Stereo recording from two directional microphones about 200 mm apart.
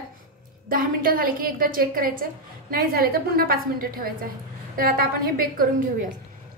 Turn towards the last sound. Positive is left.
turn(degrees=-45)  # may be behind; listen again after turning